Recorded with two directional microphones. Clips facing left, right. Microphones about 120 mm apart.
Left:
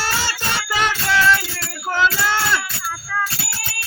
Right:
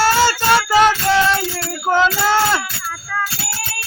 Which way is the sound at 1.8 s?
25° right (ahead or behind).